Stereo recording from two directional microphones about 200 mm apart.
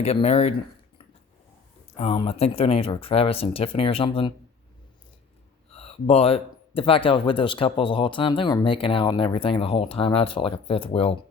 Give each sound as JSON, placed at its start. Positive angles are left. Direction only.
{"t": 0.0, "sound": "speech", "side_deg": 30}
{"t": 2.0, "sound": "speech", "side_deg": 30}
{"t": 5.7, "sound": "speech", "side_deg": 30}